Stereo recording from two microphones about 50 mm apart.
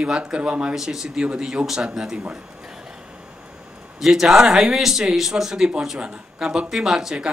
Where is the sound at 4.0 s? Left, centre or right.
Centre.